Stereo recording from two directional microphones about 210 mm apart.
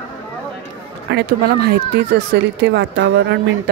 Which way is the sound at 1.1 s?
50° right (ahead or behind).